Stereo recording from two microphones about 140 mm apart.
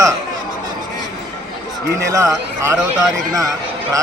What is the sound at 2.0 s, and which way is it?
Speech, 25° right (ahead or behind).